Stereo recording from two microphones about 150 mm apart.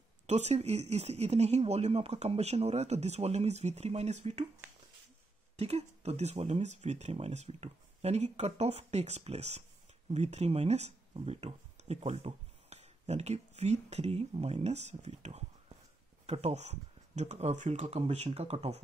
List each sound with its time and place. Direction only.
0.3 s speech: 45° right (ahead or behind)
5.6 s speech: 45° right (ahead or behind)